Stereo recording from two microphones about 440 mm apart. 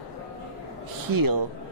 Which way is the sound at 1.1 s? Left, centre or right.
Right.